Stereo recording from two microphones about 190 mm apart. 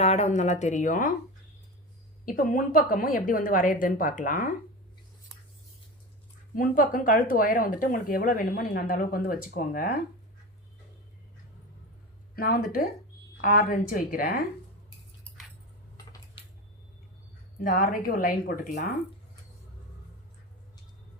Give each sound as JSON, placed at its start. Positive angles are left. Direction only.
{"t": 0.0, "sound": "speech", "side_deg": 35}
{"t": 2.2, "sound": "speech", "side_deg": 45}
{"t": 6.6, "sound": "speech", "side_deg": 45}
{"t": 12.4, "sound": "speech", "side_deg": 50}
{"t": 17.6, "sound": "speech", "side_deg": 50}